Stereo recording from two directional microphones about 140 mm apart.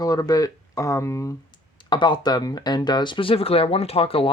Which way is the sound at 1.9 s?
35° left (ahead or behind).